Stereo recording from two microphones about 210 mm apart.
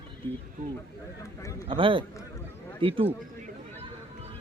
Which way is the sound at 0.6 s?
40° right (ahead or behind).